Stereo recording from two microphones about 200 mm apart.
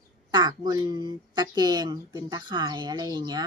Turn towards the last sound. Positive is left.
turn(degrees=-20)  # may be behind; listen again after turning